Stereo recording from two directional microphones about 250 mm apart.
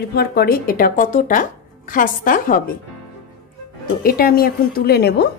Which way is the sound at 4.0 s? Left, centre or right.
Left.